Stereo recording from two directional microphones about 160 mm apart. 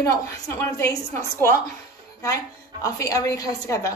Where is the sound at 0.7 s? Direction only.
20° left (ahead or behind).